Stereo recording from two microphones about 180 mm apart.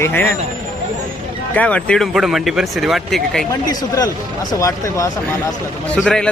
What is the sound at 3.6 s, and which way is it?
Speech, 20° left (ahead or behind).